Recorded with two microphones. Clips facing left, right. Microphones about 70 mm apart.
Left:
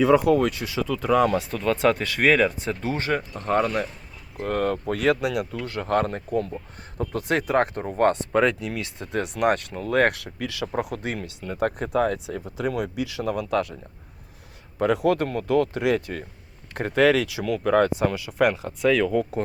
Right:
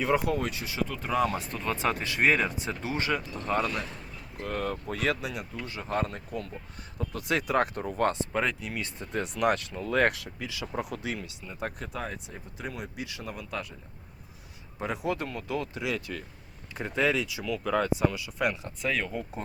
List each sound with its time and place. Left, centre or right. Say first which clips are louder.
0.1 s speech: left 9 dB; left
6.1 s speech: left 10 dB; left
7.9 s speech: left 7 dB; left
8.2 s speech: left 8 dB; left
14.8 s speech: left 10 dB; left
16.7 s speech: left 8 dB; left
18.8 s speech: left 11 dB; left